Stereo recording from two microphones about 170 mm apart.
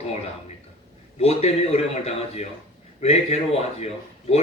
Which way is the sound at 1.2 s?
40° left (ahead or behind).